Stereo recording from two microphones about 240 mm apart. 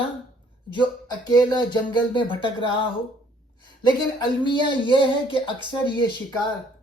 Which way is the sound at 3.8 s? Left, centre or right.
Centre.